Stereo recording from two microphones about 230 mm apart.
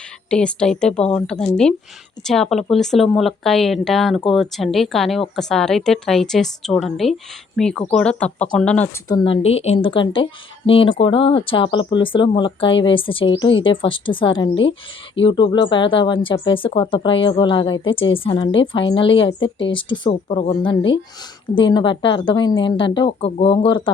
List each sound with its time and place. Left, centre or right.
0.3 s a woman's voice: centre
9.0 s a woman's voice: centre